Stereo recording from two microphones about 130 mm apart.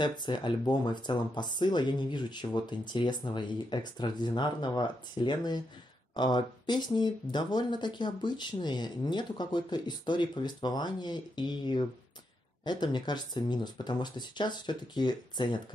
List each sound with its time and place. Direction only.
0.0 s speech: 35° left (ahead or behind)